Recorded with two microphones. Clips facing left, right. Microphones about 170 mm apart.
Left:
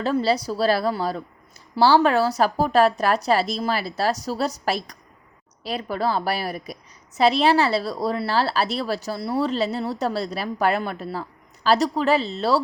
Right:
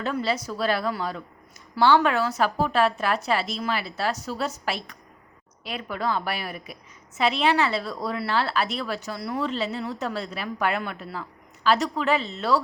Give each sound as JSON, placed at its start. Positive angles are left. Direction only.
{"t": 0.0, "sound": "a woman's voice", "side_deg": 35}